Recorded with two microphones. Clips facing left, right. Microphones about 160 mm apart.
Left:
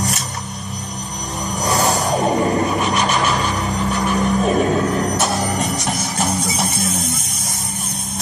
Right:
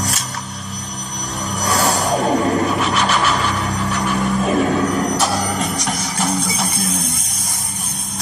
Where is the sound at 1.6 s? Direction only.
20° left (ahead or behind).